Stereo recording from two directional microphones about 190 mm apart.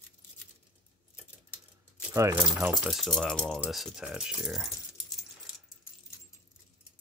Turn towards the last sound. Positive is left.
turn(degrees=0)  # may be behind; listen again after turning